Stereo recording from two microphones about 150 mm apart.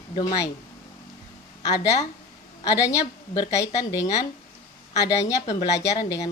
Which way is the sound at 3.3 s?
25° left (ahead or behind).